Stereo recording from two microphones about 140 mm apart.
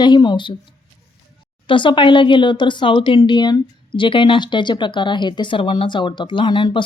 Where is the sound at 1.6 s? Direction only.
35° left (ahead or behind).